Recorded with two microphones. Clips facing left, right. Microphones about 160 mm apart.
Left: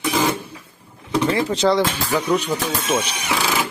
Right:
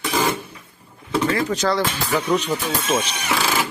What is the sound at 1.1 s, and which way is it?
Speech, 25° left (ahead or behind).